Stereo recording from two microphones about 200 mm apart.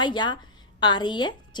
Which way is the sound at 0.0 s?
20° left (ahead or behind).